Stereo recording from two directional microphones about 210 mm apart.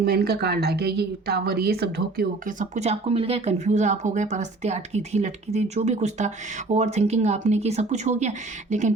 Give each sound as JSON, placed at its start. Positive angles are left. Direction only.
{"t": 0.0, "sound": "a woman's voice", "side_deg": -50}
{"t": 2.7, "sound": "speech", "side_deg": -30}